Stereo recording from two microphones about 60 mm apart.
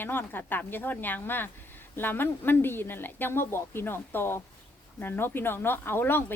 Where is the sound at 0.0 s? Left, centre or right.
Left.